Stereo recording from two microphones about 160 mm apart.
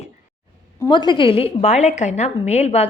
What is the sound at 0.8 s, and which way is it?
A woman's voice, 30° left (ahead or behind).